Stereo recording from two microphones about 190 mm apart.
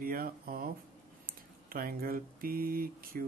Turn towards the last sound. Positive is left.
turn(degrees=-50)  # may be behind; listen again after turning